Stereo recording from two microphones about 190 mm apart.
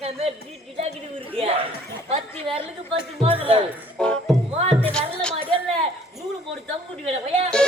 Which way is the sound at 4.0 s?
5° left (ahead or behind).